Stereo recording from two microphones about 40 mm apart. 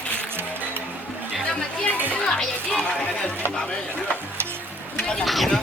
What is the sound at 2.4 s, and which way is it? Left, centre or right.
Speech, centre.